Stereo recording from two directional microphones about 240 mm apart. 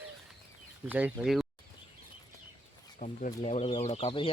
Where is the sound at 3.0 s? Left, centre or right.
Left.